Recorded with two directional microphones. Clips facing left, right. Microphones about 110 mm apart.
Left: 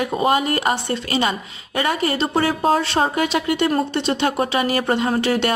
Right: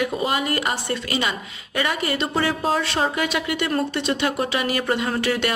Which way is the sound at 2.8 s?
30° left (ahead or behind).